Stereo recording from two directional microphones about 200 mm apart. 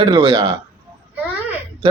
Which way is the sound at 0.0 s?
25° right (ahead or behind).